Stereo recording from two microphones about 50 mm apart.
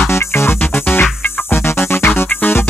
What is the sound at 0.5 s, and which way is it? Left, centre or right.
Music, left.